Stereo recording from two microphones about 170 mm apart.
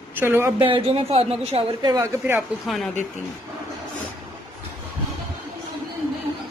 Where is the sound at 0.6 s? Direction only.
35° right (ahead or behind); by 2.5 s 15° right (ahead or behind).